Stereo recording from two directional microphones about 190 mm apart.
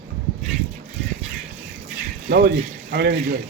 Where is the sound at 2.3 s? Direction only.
55° right (ahead or behind).